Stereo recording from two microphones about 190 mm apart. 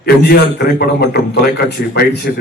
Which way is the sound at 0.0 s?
60° left (ahead or behind).